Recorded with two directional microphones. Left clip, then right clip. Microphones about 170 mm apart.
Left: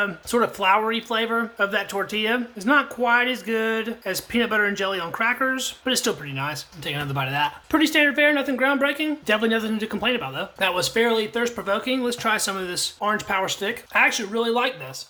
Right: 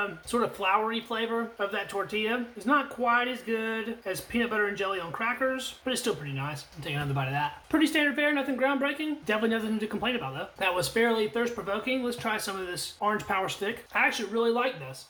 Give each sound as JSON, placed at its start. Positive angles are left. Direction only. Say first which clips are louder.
{"t": 0.0, "sound": "speech", "louder": "left 7 dB", "side_deg": 35}